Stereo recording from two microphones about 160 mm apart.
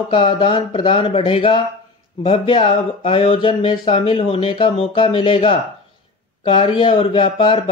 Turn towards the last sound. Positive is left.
turn(degrees=35)  # may be behind; listen again after turning